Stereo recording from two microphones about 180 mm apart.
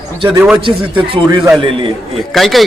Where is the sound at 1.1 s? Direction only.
25° right (ahead or behind).